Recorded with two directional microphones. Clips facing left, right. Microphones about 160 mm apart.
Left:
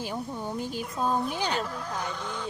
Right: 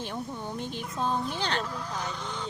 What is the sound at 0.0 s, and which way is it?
Speech, 5° left (ahead or behind).